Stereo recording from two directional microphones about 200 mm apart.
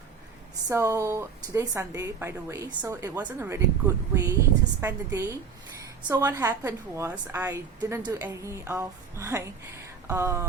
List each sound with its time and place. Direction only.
0.7 s a woman's voice: 15° right (ahead or behind)